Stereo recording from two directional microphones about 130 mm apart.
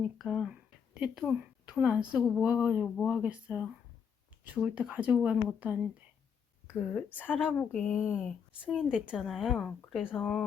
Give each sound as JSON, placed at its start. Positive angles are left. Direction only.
{"t": 0.0, "sound": "speech", "side_deg": -5}
{"t": 6.7, "sound": "a woman's voice", "side_deg": 15}